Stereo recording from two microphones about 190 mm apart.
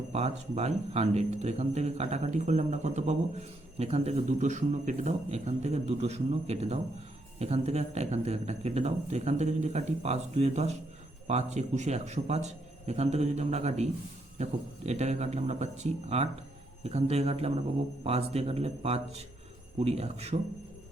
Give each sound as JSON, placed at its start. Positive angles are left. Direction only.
{"t": 0.1, "sound": "speech", "side_deg": -35}